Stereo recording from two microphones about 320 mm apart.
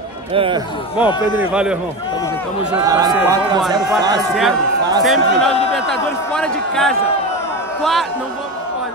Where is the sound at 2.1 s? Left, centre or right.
Centre.